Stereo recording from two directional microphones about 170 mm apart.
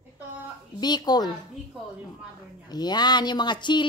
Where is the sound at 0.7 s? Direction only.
25° left (ahead or behind).